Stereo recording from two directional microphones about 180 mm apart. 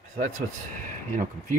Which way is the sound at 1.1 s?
45° right (ahead or behind).